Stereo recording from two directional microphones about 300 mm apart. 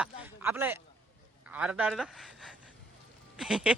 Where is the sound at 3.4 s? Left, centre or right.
Centre.